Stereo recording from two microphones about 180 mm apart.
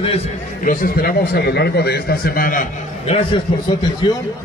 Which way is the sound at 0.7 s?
50° left (ahead or behind).